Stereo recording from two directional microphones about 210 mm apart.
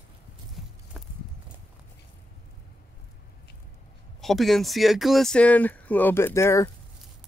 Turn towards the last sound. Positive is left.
turn(degrees=15)  # may be behind; listen again after turning